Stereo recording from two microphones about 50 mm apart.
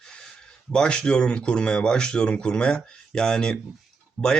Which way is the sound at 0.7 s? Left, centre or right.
Centre.